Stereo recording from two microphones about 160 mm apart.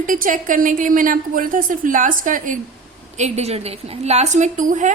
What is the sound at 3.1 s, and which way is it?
A woman's voice, 45° right (ahead or behind).